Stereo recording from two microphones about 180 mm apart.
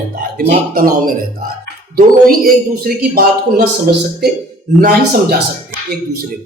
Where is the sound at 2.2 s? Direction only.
55° right (ahead or behind).